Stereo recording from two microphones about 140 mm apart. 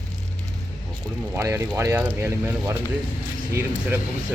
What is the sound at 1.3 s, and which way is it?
Speech, 20° right (ahead or behind).